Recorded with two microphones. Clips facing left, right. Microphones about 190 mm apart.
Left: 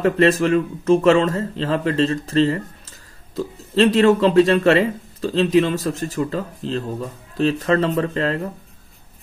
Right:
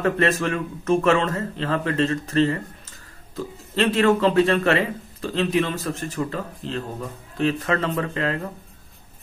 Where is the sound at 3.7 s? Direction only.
35° left (ahead or behind).